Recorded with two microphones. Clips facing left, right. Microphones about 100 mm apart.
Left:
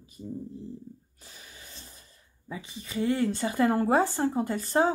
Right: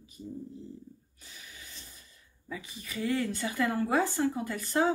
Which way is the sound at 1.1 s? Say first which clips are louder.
Left 1 dB; 35° left (ahead or behind).